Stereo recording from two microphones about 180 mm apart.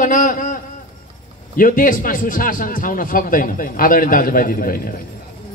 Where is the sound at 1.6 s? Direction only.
50° left (ahead or behind).